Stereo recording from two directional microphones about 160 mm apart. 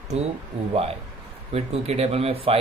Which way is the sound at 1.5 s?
40° right (ahead or behind).